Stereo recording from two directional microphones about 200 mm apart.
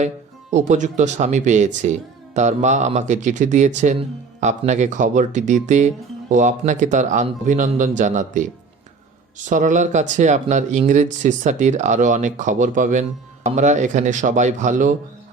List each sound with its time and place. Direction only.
0.5 s speech: 35° right (ahead or behind)
9.5 s speech: 40° right (ahead or behind)